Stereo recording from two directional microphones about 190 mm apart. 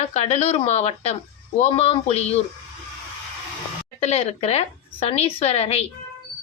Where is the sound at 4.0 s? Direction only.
35° left (ahead or behind).